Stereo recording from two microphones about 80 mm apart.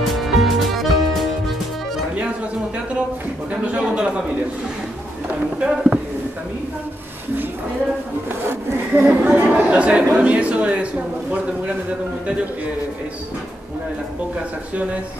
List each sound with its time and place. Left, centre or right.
0.1 s music: centre
3.6 s speech: centre
5.6 s speech: centre
8.3 s speech: right
9.2 s speech: centre